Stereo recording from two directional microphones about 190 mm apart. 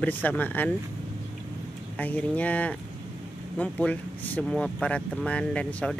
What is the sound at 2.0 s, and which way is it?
Speech, 10° left (ahead or behind).